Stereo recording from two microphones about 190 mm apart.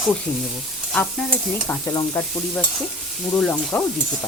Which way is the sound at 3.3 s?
5° left (ahead or behind).